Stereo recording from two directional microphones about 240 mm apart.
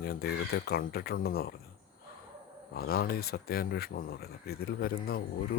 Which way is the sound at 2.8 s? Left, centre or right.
Left.